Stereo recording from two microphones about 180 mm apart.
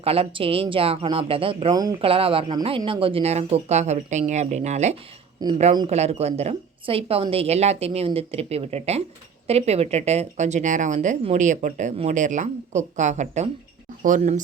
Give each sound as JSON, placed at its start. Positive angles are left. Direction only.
{"t": 0.0, "sound": "speech", "side_deg": -30}
{"t": 5.4, "sound": "a woman's voice", "side_deg": -20}
{"t": 5.9, "sound": "speech", "side_deg": -35}